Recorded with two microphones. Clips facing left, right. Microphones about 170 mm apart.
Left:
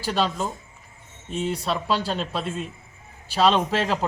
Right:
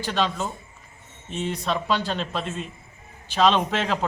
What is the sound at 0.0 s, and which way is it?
Speech, 5° left (ahead or behind).